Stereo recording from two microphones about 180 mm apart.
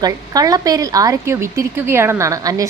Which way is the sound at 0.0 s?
20° right (ahead or behind).